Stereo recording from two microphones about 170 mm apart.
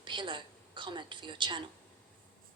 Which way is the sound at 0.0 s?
30° right (ahead or behind).